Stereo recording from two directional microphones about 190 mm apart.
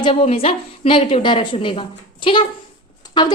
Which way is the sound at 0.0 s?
30° left (ahead or behind).